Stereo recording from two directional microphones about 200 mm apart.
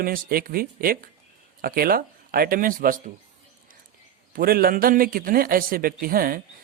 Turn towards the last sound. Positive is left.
turn(degrees=-45)  # may be behind; listen again after turning